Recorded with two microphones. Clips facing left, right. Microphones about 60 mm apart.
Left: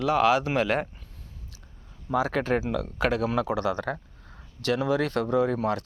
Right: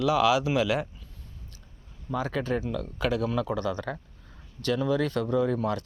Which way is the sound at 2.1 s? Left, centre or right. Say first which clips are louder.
Left 4 dB; left.